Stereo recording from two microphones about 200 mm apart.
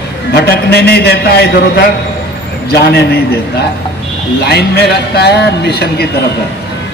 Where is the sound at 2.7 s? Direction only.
50° left (ahead or behind).